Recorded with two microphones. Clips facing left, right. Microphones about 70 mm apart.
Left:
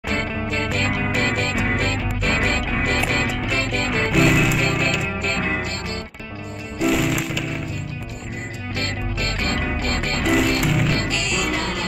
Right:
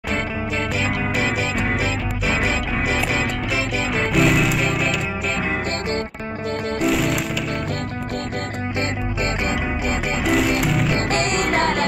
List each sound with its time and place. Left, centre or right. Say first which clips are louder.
0.7 s music: even; centre
6.8 s music: left 2 dB; centre
9.4 s music: right 1 dB; centre
11.1 s music: right 4 dB; right